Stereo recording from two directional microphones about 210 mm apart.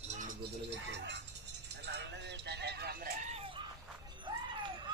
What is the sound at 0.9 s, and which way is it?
Speech, 55° right (ahead or behind).